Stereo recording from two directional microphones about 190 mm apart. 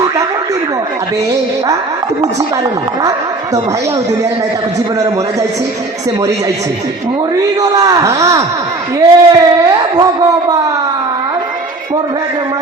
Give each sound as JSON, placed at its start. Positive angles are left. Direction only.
{"t": 7.6, "sound": "a man's voice", "side_deg": -20}